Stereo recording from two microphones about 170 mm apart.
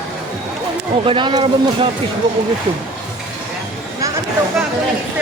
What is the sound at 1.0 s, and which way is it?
Speech, 30° right (ahead or behind).